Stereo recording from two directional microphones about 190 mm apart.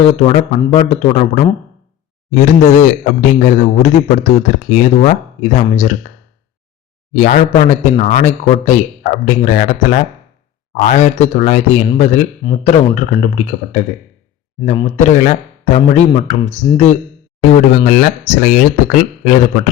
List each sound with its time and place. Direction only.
0.0 s a man's voice: 30° left (ahead or behind)
7.1 s a man's voice: 40° left (ahead or behind)
10.8 s a man's voice: 40° left (ahead or behind)
14.8 s a man's voice: 35° left (ahead or behind)